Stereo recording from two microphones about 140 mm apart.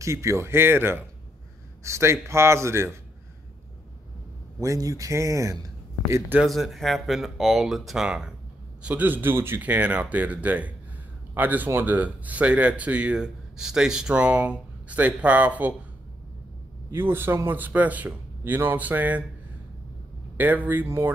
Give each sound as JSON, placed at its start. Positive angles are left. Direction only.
{"t": 0.0, "sound": "a man's voice", "side_deg": -20}
{"t": 4.6, "sound": "speech", "side_deg": -25}
{"t": 6.4, "sound": "speech", "side_deg": 0}
{"t": 16.9, "sound": "speech", "side_deg": -15}
{"t": 20.3, "sound": "speech", "side_deg": -10}